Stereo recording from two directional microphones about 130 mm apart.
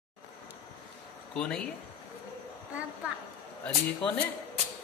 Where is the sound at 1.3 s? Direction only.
5° left (ahead or behind).